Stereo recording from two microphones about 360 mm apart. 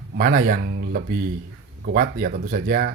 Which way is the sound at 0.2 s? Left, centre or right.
Right.